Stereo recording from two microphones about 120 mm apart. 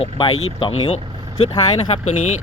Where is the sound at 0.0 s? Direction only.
55° left (ahead or behind).